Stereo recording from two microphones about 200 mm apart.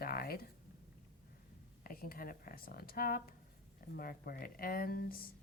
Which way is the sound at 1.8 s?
45° left (ahead or behind).